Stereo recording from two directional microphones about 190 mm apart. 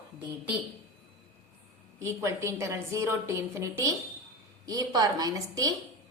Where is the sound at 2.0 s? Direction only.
15° right (ahead or behind).